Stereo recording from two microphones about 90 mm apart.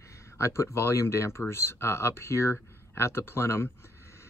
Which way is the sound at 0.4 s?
30° left (ahead or behind).